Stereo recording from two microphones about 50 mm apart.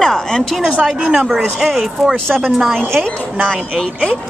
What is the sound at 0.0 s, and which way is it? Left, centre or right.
Speech, centre.